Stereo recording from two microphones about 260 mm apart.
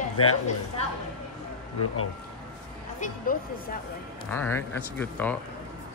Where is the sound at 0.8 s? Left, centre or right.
Left.